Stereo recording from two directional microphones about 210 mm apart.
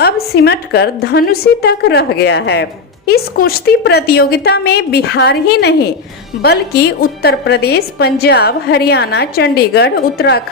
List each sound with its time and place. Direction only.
0.0 s a woman's voice: 50° left (ahead or behind)